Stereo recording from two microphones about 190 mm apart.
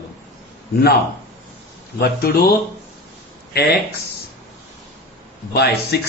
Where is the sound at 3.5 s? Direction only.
55° left (ahead or behind).